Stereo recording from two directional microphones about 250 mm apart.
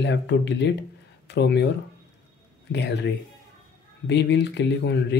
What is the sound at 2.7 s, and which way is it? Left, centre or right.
Speech, left.